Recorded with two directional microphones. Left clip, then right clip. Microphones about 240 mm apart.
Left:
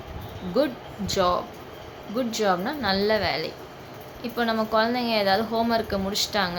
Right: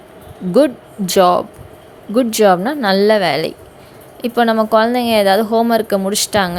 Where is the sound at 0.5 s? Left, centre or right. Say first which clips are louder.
Right 12 dB; right.